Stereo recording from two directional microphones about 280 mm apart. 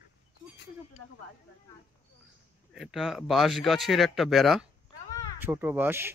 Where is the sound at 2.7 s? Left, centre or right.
Centre.